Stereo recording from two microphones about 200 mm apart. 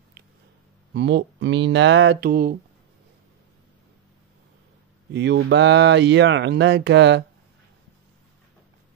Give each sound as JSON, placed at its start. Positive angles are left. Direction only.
{"t": 0.9, "sound": "speech", "side_deg": -60}
{"t": 5.1, "sound": "speech", "side_deg": -60}